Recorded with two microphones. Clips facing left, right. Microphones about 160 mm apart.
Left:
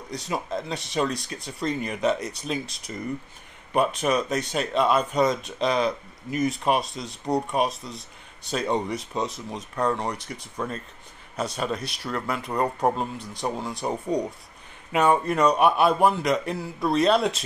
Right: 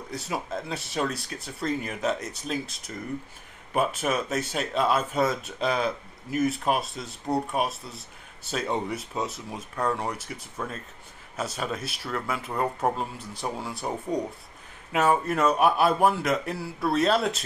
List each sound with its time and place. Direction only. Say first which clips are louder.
0.1 s speech: left 3 dB; 5° right (ahead or behind)